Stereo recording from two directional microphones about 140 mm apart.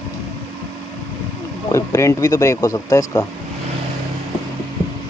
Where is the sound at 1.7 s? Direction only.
20° left (ahead or behind).